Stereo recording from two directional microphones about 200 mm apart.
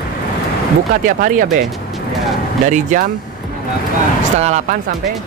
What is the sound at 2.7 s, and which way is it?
Speech, 40° right (ahead or behind).